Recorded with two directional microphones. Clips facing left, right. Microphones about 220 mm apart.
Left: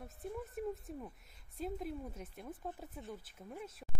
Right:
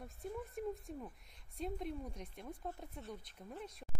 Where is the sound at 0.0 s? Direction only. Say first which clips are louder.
Left 1 dB; centre (ahead or behind).